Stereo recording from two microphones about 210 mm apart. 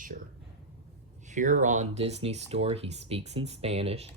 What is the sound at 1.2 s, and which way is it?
Speech, 35° right (ahead or behind).